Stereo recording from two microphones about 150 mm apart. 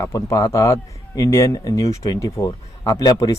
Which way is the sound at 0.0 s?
20° left (ahead or behind).